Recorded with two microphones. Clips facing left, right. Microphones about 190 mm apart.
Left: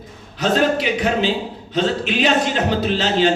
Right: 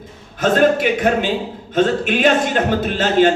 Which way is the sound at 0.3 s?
50° right (ahead or behind).